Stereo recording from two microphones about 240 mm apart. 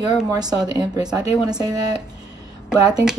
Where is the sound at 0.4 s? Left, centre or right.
Centre.